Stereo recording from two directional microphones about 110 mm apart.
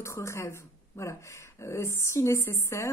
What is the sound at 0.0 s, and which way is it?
A woman's voice, 25° left (ahead or behind).